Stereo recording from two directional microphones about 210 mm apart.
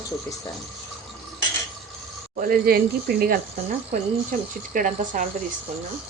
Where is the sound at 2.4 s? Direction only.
45° right (ahead or behind).